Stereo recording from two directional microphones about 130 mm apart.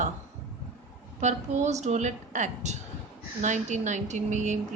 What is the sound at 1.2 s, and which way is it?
A woman's voice, 65° right (ahead or behind).